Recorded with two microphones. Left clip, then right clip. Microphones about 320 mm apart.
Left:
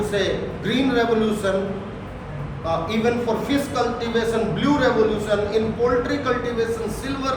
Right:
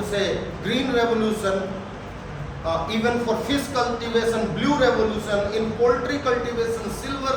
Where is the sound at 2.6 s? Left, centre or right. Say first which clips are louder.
Left 1 dB; centre.